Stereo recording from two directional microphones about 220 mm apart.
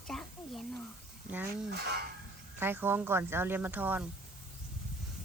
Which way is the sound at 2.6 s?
10° right (ahead or behind).